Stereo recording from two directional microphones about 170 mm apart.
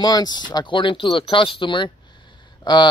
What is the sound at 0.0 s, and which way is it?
Speech, 25° left (ahead or behind).